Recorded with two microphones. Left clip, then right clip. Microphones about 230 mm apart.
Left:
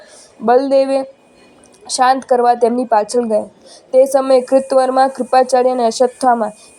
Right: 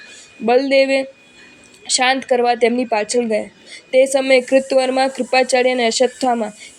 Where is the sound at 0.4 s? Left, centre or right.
Centre.